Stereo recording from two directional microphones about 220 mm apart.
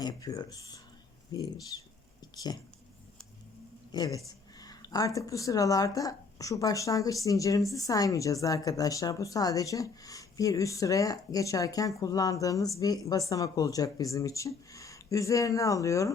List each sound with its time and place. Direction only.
0.0 s a woman's voice: 15° left (ahead or behind)
2.2 s a sound: 20° left (ahead or behind)
3.9 s a woman's voice: 15° left (ahead or behind)